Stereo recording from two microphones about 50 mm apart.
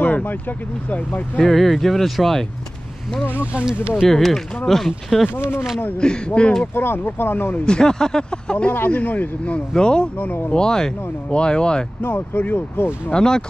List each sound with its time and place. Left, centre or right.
0.0 s speech: left
1.4 s speech: centre
4.1 s speech: centre
5.3 s speech: left
5.9 s speech: centre
6.7 s speech: left
7.6 s speech: centre
8.7 s speech: left
9.8 s speech: centre
10.1 s speech: left
10.5 s speech: centre
12.0 s speech: left
13.1 s speech: centre